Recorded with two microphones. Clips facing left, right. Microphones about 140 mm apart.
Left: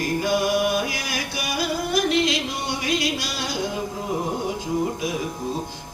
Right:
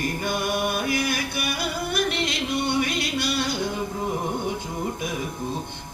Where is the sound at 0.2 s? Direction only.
55° right (ahead or behind).